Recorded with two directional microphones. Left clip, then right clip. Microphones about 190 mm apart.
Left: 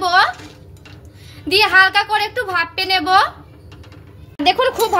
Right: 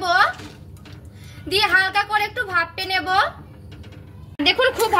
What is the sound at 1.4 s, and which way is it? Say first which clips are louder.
A woman's voice: left 6 dB; 50° left (ahead or behind).